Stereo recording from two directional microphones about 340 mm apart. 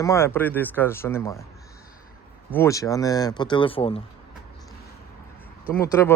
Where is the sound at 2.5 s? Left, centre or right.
Centre.